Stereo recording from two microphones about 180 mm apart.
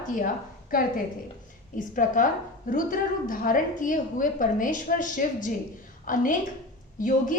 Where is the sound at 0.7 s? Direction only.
50° left (ahead or behind).